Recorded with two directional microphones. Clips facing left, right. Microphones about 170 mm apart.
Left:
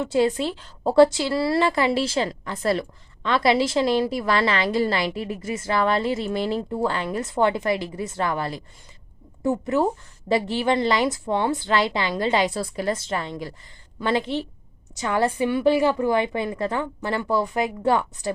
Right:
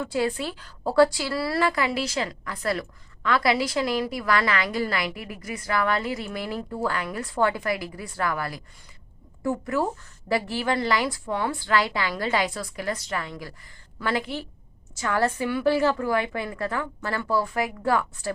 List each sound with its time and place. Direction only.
0.0 s a woman's voice: 20° left (ahead or behind)